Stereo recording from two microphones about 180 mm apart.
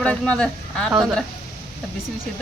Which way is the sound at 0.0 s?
5° left (ahead or behind).